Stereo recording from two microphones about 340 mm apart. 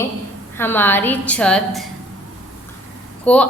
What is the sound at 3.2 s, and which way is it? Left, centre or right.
Speech, centre.